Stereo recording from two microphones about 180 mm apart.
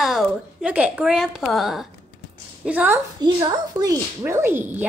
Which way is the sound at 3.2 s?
25° right (ahead or behind).